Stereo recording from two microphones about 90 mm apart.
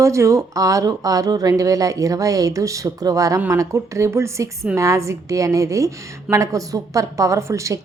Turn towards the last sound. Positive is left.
turn(degrees=-35)  # may be behind; listen again after turning